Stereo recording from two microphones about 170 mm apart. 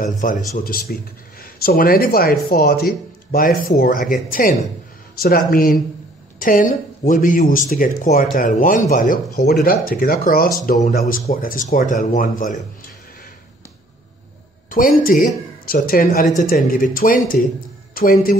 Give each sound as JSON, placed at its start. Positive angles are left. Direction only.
{"t": 0.2, "sound": "speech", "side_deg": 55}
{"t": 14.7, "sound": "speech", "side_deg": 55}